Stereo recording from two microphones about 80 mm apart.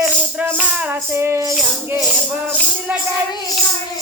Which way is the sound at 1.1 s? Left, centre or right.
Right.